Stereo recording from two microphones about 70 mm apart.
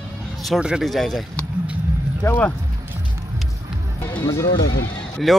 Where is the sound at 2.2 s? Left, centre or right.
Left.